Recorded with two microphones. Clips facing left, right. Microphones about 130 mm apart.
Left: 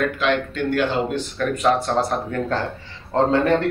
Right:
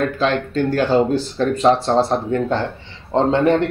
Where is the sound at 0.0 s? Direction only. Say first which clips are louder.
Right 2 dB; 35° right (ahead or behind).